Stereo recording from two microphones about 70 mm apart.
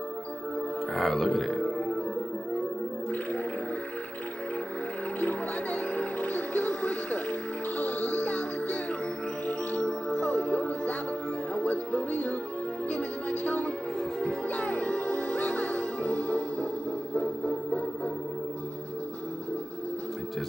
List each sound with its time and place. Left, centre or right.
0.9 s speech: centre
5.2 s music: left
9.5 s music: centre